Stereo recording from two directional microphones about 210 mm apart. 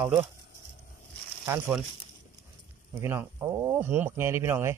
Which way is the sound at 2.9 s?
10° right (ahead or behind).